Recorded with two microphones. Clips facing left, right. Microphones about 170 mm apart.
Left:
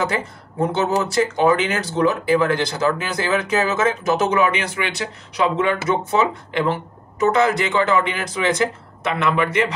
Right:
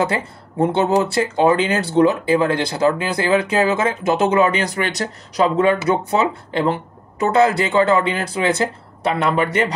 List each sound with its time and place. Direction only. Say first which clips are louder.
0.0 s speech: right 2 dB; 30° right (ahead or behind)